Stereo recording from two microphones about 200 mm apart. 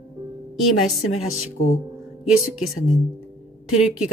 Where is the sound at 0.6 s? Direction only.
Centre (ahead or behind).